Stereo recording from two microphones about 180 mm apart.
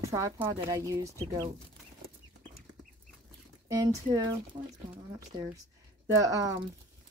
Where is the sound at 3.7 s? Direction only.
20° right (ahead or behind).